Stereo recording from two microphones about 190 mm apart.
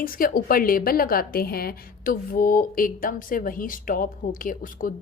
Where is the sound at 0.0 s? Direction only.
50° left (ahead or behind).